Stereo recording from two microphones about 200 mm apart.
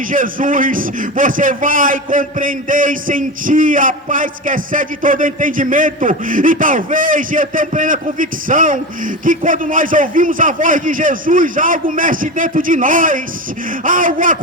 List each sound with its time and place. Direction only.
0.1 s speech: 40° right (ahead or behind)